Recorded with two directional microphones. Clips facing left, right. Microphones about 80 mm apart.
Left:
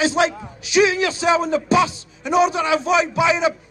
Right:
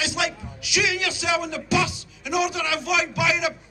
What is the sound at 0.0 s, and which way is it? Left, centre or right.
Speech, left.